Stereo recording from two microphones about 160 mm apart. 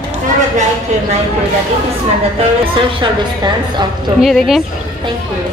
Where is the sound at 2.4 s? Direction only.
30° right (ahead or behind).